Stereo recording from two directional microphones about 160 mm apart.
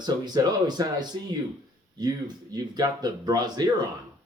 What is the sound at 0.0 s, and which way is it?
Speech, 25° right (ahead or behind).